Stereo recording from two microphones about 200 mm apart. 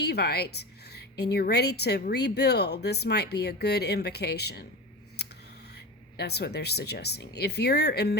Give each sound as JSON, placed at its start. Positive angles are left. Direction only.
{"t": 0.0, "sound": "a woman's voice", "side_deg": 55}
{"t": 6.1, "sound": "speech", "side_deg": 55}